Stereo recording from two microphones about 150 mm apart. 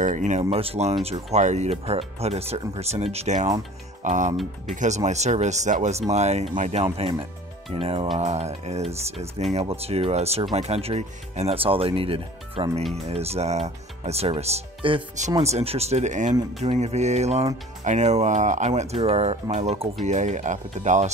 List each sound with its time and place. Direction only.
0.0 s speech: 55° right (ahead or behind)